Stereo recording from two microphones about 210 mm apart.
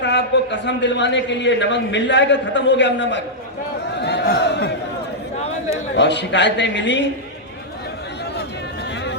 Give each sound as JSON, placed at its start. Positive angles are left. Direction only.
{"t": 0.0, "sound": "a man's voice", "side_deg": 55}
{"t": 5.7, "sound": "a man's voice", "side_deg": 55}